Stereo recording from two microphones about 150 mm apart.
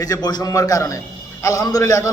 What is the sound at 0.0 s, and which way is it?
A man's voice, 25° left (ahead or behind).